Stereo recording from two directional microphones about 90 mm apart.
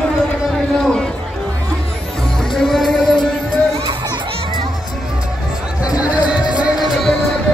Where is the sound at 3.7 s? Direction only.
70° right (ahead or behind).